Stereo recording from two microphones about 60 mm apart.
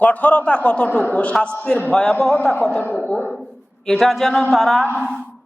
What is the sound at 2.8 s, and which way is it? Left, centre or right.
Speech, left.